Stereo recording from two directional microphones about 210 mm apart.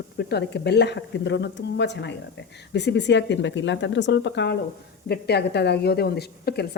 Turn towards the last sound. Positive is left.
turn(degrees=50)  # may be behind; listen again after turning